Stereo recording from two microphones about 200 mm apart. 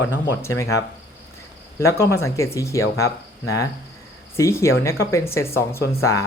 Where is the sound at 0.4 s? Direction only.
15° left (ahead or behind).